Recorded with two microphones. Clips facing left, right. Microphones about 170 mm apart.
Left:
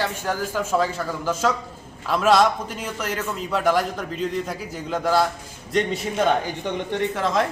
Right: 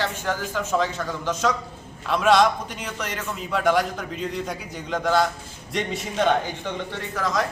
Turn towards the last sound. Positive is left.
turn(degrees=25)  # may be behind; listen again after turning